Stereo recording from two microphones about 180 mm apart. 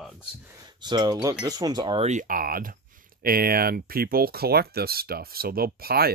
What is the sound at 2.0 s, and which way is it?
Speech, 45° right (ahead or behind).